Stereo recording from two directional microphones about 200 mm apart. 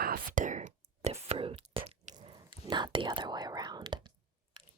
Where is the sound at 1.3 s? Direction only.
25° right (ahead or behind).